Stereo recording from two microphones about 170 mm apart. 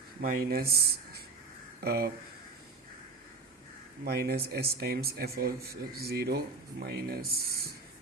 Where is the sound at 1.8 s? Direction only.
65° right (ahead or behind).